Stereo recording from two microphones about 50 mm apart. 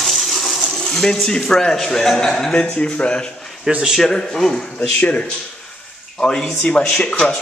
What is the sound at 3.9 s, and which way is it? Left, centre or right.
Speech, centre.